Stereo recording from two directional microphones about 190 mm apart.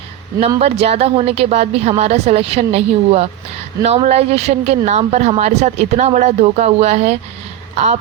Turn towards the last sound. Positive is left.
turn(degrees=-35)  # may be behind; listen again after turning